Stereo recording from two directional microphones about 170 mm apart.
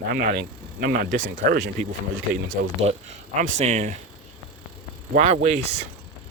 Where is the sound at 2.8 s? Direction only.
40° right (ahead or behind).